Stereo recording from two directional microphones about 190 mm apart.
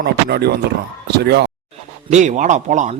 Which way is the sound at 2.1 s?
40° right (ahead or behind).